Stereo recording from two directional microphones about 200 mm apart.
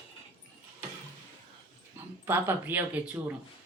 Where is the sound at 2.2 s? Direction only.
10° right (ahead or behind).